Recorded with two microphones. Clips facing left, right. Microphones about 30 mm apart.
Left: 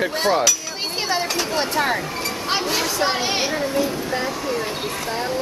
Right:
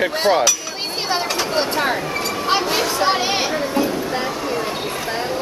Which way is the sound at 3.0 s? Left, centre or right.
Centre.